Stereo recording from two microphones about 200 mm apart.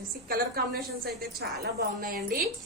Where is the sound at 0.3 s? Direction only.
50° right (ahead or behind).